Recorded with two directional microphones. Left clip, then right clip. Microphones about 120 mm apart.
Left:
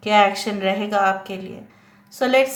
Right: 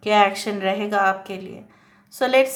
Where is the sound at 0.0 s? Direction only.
30° right (ahead or behind).